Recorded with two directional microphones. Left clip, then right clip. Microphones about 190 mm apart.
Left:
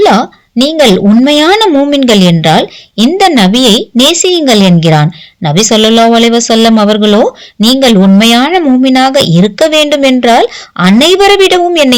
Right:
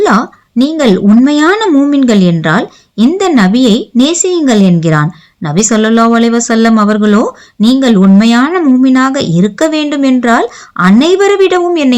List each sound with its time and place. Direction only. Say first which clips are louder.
0.0 s a woman's voice: left 3 dB; 15° left (ahead or behind)